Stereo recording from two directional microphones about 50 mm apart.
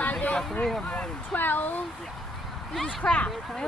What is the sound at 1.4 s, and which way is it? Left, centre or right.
Speech, left.